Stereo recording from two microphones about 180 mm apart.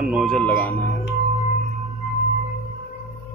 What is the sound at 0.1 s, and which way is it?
Speech, centre (ahead or behind).